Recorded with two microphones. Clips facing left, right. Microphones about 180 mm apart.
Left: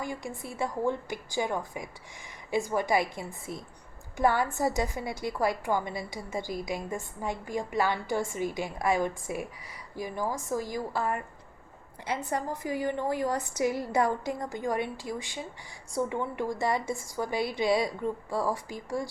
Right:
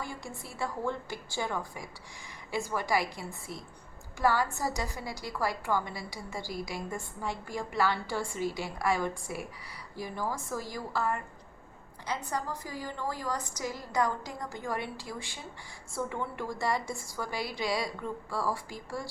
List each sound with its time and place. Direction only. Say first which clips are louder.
0.0 s a woman's voice: left 5 dB; 15° left (ahead or behind)